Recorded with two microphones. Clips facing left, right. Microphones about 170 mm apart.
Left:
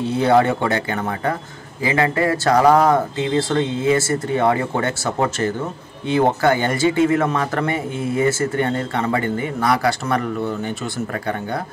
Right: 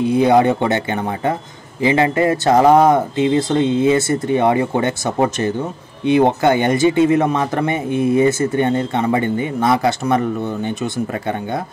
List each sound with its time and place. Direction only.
0.0 s a man's voice: 15° right (ahead or behind)